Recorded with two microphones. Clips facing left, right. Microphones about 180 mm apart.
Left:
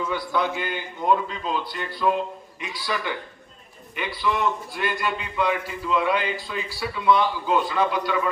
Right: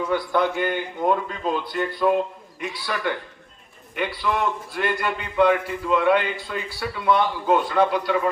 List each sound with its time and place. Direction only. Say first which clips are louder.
0.1 s a man's voice: right 4 dB; 50° right (ahead or behind)